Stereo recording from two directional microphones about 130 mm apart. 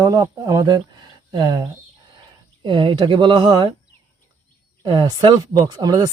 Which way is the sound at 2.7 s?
40° right (ahead or behind).